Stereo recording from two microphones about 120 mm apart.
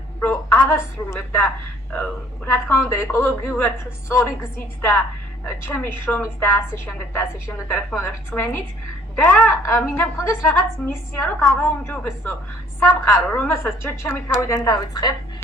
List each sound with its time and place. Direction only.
0.2 s a woman's voice: 20° left (ahead or behind)
9.5 s a woman's voice: 20° left (ahead or behind)
13.1 s a woman's voice: 5° left (ahead or behind)
13.5 s a woman's voice: 20° left (ahead or behind)